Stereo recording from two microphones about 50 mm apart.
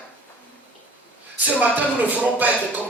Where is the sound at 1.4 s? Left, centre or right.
Right.